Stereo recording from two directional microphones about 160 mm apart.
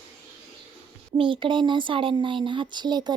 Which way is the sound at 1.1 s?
30° right (ahead or behind).